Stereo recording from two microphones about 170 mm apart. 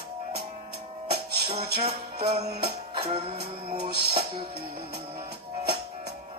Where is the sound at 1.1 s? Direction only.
70° right (ahead or behind).